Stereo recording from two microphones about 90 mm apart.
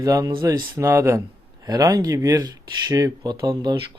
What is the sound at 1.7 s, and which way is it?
Speech, 45° right (ahead or behind).